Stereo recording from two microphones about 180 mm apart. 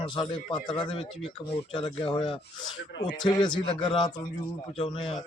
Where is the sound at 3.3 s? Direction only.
25° left (ahead or behind).